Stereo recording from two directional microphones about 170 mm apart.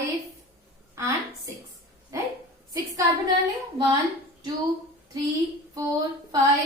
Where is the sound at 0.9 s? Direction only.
15° right (ahead or behind).